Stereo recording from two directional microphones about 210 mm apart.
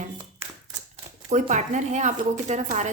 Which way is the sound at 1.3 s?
35° right (ahead or behind).